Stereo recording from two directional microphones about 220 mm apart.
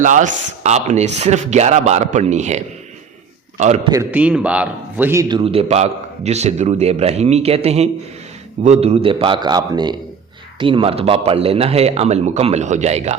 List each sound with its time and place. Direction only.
0.0 s speech: 35° right (ahead or behind)
3.6 s speech: 30° right (ahead or behind)
3.9 s a man's voice: 5° right (ahead or behind)
5.3 s a man's voice: 25° right (ahead or behind)